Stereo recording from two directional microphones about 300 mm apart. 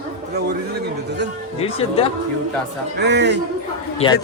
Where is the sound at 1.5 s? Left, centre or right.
Centre.